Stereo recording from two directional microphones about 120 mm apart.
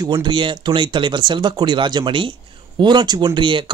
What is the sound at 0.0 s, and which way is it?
A man's voice, 40° right (ahead or behind).